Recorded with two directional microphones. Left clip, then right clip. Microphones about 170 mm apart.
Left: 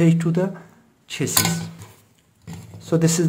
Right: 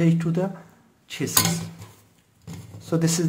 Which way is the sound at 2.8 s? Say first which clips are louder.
Left 4 dB; 20° left (ahead or behind).